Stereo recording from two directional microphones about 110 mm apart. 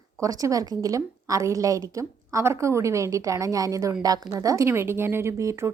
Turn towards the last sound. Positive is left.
turn(degrees=-25)  # may be behind; listen again after turning